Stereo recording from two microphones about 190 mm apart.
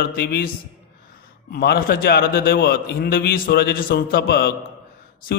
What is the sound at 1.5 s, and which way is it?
A man's voice, 55° left (ahead or behind).